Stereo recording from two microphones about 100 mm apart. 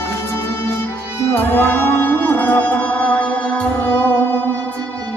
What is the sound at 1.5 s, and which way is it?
Music, 20° left (ahead or behind).